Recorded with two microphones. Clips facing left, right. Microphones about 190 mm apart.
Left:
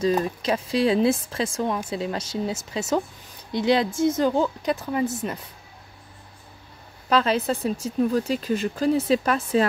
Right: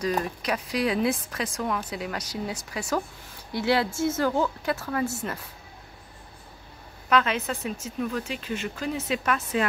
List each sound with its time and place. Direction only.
0.0 s a woman's voice: 25° left (ahead or behind)
7.1 s speech: 35° left (ahead or behind)